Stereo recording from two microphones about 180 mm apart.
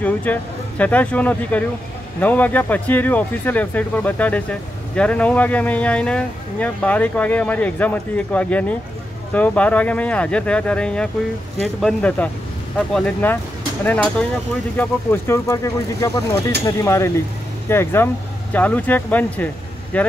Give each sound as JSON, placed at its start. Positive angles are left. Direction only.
{"t": 0.0, "sound": "speech", "side_deg": 10}